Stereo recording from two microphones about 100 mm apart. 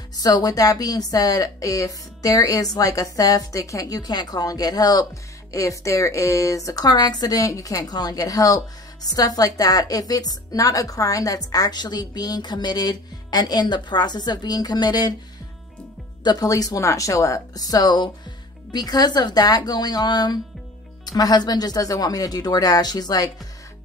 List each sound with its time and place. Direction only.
0.1 s a woman's voice: 40° left (ahead or behind)
16.3 s a woman's voice: 40° left (ahead or behind)